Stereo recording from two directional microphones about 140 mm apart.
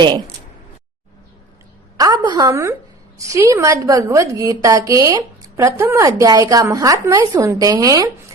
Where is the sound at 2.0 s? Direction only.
30° right (ahead or behind).